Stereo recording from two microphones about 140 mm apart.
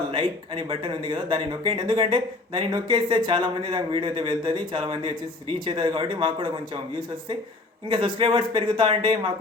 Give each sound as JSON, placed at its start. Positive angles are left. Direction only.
{"t": 0.1, "sound": "speech", "side_deg": -35}
{"t": 7.9, "sound": "speech", "side_deg": -35}